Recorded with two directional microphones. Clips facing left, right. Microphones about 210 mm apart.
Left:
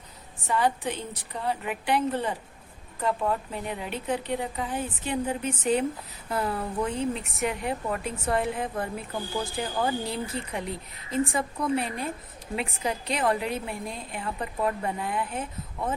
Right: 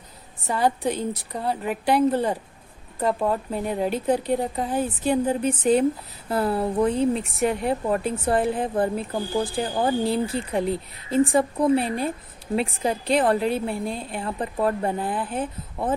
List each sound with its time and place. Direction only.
0.4 s speech: 35° right (ahead or behind)